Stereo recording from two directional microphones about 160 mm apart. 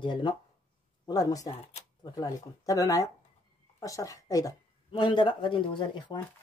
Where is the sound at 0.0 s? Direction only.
30° left (ahead or behind).